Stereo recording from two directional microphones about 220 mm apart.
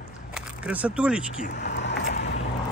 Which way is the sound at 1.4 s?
45° left (ahead or behind).